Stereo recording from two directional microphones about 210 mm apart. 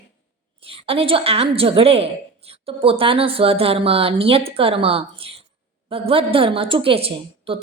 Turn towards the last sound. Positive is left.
turn(degrees=-25)  # may be behind; listen again after turning